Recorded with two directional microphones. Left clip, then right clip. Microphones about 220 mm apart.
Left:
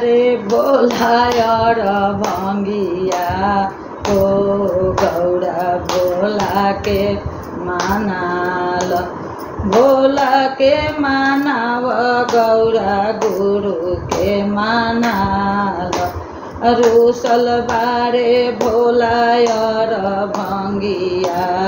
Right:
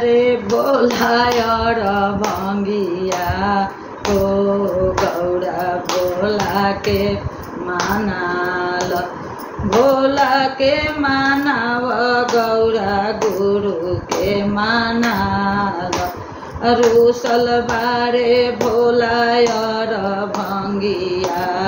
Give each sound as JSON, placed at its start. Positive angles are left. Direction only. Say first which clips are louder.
{"t": 0.0, "sound": "music", "louder": "left 1 dB", "side_deg": -15}
{"t": 6.2, "sound": "music", "louder": "left 2 dB", "side_deg": -15}
{"t": 9.7, "sound": "music", "louder": "left 2 dB", "side_deg": -15}
{"t": 14.2, "sound": "music", "louder": "left 1 dB", "side_deg": -20}
{"t": 16.6, "sound": "music", "louder": "left 1 dB", "side_deg": -15}